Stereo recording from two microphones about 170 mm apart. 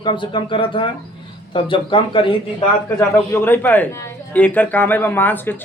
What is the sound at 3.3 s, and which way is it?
Speech, 10° left (ahead or behind).